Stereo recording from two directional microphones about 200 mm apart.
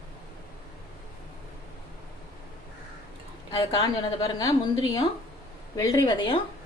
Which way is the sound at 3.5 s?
25° left (ahead or behind).